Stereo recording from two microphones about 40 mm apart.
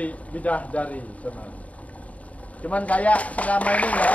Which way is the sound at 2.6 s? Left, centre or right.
Left.